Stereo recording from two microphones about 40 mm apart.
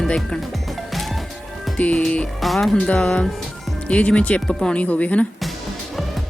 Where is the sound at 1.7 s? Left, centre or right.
Left.